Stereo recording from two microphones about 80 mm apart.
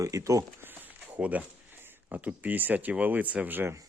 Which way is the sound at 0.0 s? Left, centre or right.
Right.